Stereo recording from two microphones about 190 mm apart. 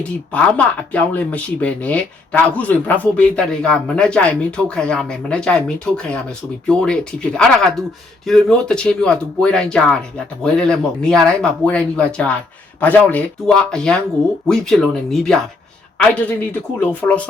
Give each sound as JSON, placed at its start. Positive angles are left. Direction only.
{"t": 0.0, "sound": "a man's voice", "side_deg": 5}